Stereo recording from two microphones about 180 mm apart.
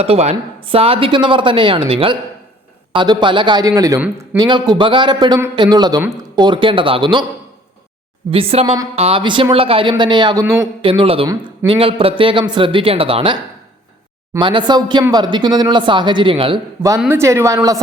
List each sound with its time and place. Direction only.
0.0 s a woman's voice: 35° right (ahead or behind); by 4.0 s 20° right (ahead or behind)
4.0 s a woman's voice: 10° right (ahead or behind)
4.4 s a woman's voice: 25° right (ahead or behind)
8.3 s a woman's voice: 30° right (ahead or behind)
14.3 s a woman's voice: 25° right (ahead or behind)
17.0 s a woman's voice: 15° right (ahead or behind)